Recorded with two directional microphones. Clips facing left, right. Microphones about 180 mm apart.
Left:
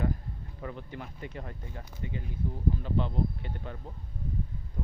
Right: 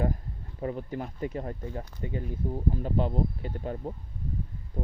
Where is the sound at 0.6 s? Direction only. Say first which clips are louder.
Right 8 dB; 35° right (ahead or behind).